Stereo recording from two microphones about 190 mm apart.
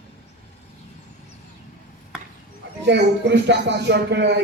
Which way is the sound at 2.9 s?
65° right (ahead or behind).